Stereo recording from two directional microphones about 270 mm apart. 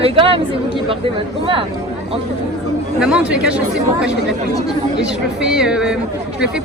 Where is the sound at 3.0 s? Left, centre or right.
Centre.